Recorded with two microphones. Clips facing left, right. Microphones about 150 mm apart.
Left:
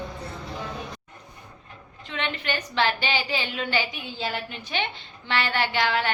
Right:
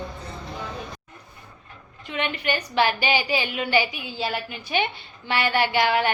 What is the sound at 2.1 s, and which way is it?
A woman's voice, 10° right (ahead or behind).